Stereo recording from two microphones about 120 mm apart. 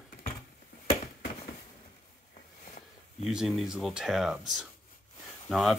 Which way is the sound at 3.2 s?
Centre (ahead or behind).